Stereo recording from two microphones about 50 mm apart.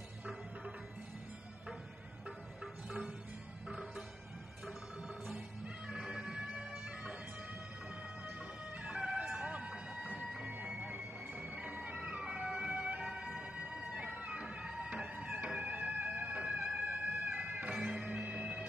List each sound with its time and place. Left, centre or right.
5.9 s bagpipes: centre
8.8 s music: right
9.5 s a sound: right
10.8 s emergency vehicle: right
16.4 s music: centre
16.8 s music: right
17.7 s music: centre
18.0 s bagpipes: right